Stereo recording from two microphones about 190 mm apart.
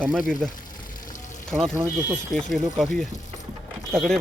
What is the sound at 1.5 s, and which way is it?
Speech, 5° right (ahead or behind).